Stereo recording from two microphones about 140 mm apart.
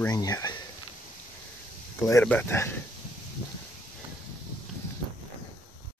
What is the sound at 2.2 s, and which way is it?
Speech, 15° left (ahead or behind).